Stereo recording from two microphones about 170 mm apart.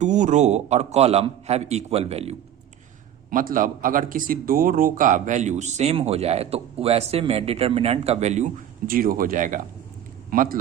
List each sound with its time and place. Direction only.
0.0 s a man's voice: 45° right (ahead or behind)
3.2 s speech: 55° right (ahead or behind)
8.9 s speech: 55° right (ahead or behind)